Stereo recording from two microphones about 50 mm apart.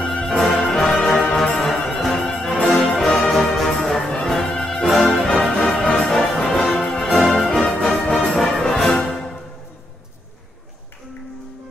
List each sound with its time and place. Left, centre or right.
0.0 s music: centre
0.4 s music: centre